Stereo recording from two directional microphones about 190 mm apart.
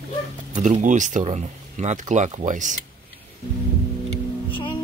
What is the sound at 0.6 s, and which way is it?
Speech, 40° right (ahead or behind).